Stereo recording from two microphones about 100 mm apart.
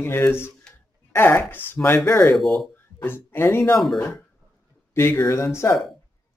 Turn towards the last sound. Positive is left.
turn(degrees=30)  # may be behind; listen again after turning